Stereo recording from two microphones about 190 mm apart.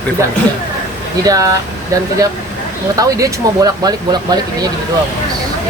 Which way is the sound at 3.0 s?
20° right (ahead or behind).